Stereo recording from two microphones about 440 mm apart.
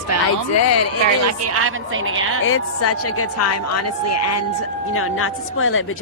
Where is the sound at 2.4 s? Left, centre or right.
Left.